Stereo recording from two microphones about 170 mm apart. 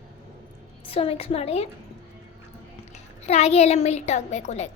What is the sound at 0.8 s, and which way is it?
Speech, 35° left (ahead or behind).